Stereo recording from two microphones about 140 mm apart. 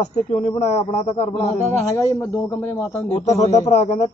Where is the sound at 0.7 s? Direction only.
45° left (ahead or behind).